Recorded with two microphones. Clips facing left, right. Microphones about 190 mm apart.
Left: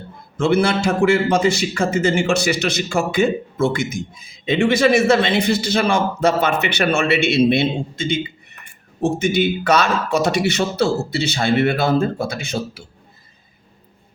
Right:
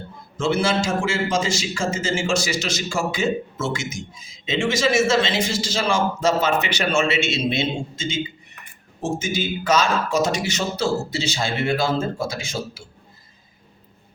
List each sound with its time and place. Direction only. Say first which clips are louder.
0.3 s a man's voice: left 4 dB; 60° left (ahead or behind)